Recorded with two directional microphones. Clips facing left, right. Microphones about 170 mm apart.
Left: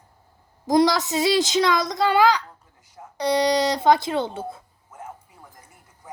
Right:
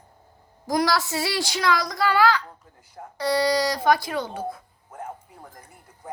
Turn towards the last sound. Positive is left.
turn(degrees=25)  # may be behind; listen again after turning